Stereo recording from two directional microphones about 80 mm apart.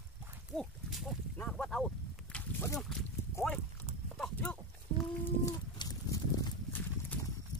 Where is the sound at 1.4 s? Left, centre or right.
Centre.